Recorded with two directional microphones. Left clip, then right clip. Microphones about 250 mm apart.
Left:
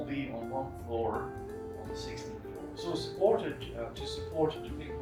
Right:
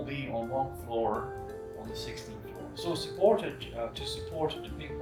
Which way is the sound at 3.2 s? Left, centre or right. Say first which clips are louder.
Right 3 dB; right.